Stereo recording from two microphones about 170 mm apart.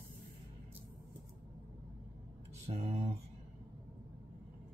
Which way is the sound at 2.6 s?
40° right (ahead or behind).